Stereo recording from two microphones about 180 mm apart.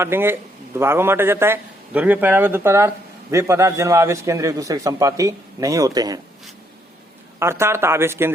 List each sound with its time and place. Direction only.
0.0 s a man's voice: 10° right (ahead or behind)
7.3 s a man's voice: 15° right (ahead or behind)